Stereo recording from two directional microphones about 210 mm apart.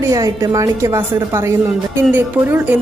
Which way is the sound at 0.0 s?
15° right (ahead or behind).